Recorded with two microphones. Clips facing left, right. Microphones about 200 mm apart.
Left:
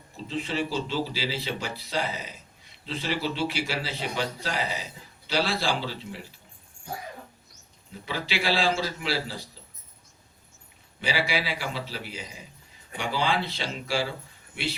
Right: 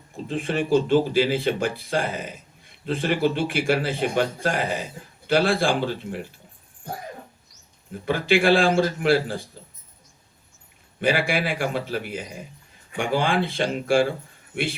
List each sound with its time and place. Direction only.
0.3 s speech: 55° right (ahead or behind)
8.0 s speech: 50° right (ahead or behind)
11.0 s speech: 50° right (ahead or behind)